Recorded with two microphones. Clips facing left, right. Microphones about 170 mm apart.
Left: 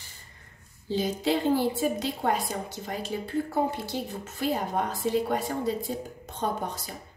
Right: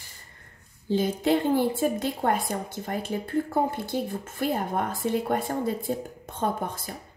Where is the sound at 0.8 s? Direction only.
50° right (ahead or behind).